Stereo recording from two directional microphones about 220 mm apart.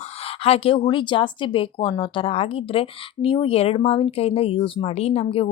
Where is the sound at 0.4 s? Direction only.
25° left (ahead or behind).